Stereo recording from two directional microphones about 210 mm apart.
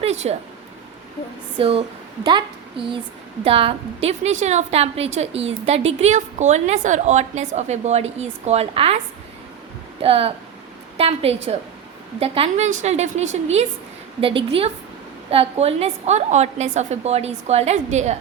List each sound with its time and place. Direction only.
0.0 s a sound: 30° right (ahead or behind)
1.5 s a woman's voice: 25° right (ahead or behind)
10.0 s a woman's voice: 25° right (ahead or behind)